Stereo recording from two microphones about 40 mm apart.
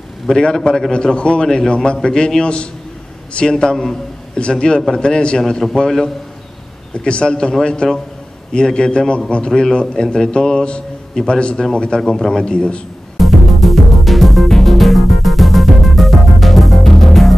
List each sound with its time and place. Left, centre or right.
0.9 s a man's voice: left
5.5 s a man's voice: centre
6.9 s a man's voice: left
12.0 s a man's voice: centre
12.4 s a man's voice: left
13.2 s music: centre